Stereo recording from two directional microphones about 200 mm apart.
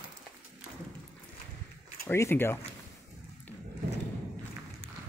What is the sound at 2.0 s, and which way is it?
Speech, 10° left (ahead or behind).